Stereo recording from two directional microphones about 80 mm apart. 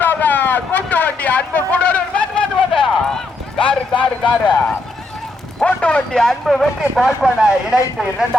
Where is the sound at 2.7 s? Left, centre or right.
Centre.